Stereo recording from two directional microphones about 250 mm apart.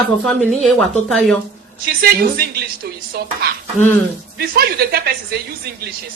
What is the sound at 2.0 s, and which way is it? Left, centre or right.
Speech, right.